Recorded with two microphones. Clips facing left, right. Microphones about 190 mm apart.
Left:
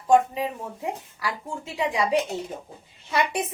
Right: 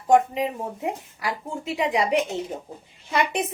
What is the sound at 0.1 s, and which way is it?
Speech, 20° right (ahead or behind).